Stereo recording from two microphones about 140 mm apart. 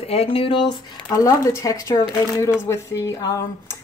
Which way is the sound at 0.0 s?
45° left (ahead or behind).